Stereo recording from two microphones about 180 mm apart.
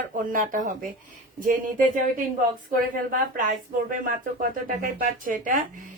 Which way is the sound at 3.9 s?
50° right (ahead or behind).